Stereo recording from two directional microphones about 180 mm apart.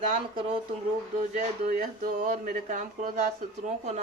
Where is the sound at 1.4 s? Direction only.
45° right (ahead or behind).